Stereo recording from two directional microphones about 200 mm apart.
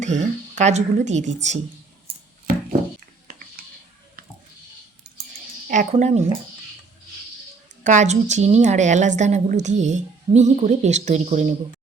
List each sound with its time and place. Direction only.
0.0 s a woman's voice: 35° right (ahead or behind)
5.6 s a sound: 45° right (ahead or behind)
5.9 s a woman's voice: 35° right (ahead or behind)
7.9 s a woman's voice: 35° right (ahead or behind)